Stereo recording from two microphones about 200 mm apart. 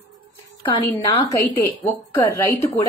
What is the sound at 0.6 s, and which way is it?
A woman's voice, 25° left (ahead or behind).